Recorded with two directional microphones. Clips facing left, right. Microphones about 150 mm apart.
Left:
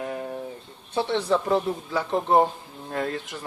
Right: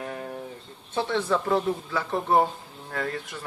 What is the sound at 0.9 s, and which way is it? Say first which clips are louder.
Speech: left 2 dB; 20° left (ahead or behind).